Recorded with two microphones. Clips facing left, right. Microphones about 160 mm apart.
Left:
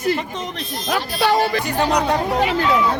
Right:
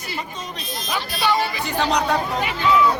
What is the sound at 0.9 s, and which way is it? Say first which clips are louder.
Speech: left 4 dB; 55° left (ahead or behind).